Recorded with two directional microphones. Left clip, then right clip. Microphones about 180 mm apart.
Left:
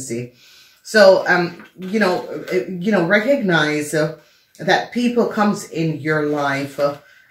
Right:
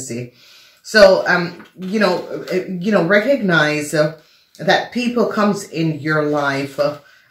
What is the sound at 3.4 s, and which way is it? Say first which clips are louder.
Speech: right 2 dB; 25° right (ahead or behind).